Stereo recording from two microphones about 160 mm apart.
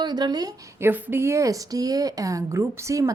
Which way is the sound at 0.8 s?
10° right (ahead or behind).